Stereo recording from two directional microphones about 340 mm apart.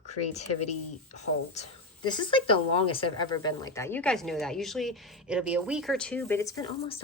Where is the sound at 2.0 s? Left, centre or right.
Centre.